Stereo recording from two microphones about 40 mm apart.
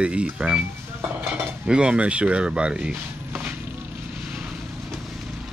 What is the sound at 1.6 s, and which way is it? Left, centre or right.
Speech, right.